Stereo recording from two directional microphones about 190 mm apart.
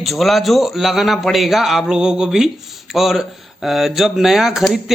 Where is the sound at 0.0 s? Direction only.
Centre (ahead or behind).